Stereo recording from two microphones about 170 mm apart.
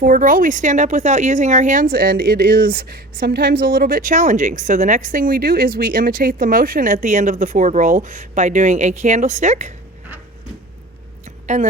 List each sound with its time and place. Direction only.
0.0 s speech: 55° right (ahead or behind)
11.4 s a woman's voice: 45° right (ahead or behind)